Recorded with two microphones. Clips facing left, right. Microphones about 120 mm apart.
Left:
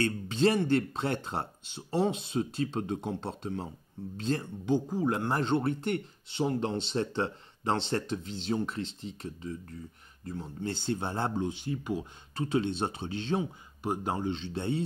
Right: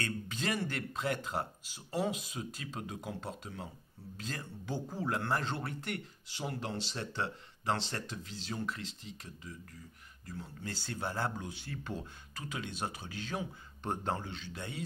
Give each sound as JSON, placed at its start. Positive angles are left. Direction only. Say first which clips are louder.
{"t": 0.0, "sound": "speech", "louder": "left 11 dB", "side_deg": 30}
{"t": 12.4, "sound": "speech", "louder": "left 11 dB", "side_deg": 30}
{"t": 13.8, "sound": "speech", "louder": "left 5 dB", "side_deg": 15}